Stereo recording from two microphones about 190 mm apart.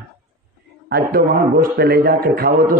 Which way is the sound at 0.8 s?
55° right (ahead or behind).